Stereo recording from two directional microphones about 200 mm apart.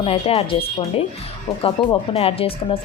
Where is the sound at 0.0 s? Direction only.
30° left (ahead or behind).